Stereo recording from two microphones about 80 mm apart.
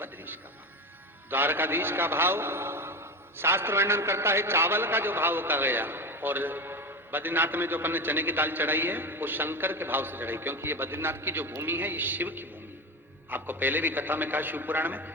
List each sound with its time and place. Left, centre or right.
1.3 s a man's voice: right